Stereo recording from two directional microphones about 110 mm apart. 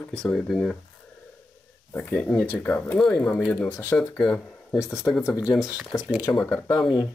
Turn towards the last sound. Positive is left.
turn(degrees=5)  # may be behind; listen again after turning